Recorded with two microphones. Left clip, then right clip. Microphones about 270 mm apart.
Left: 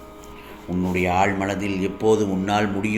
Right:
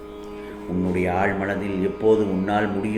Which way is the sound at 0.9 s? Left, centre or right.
Left.